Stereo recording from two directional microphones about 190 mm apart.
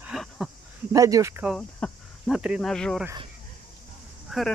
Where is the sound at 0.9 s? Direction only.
20° right (ahead or behind).